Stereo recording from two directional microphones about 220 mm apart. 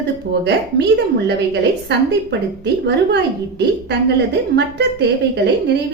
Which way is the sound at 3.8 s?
50° right (ahead or behind).